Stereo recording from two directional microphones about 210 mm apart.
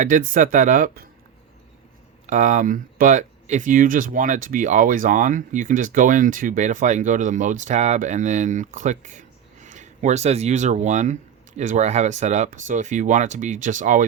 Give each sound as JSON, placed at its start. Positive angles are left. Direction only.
{"t": 0.0, "sound": "speech", "side_deg": -40}
{"t": 2.2, "sound": "speech", "side_deg": -35}